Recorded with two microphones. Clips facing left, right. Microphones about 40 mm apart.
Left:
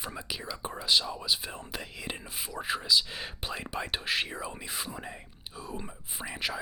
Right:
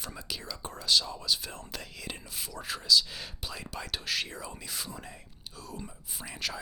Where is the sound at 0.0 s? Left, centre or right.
Centre.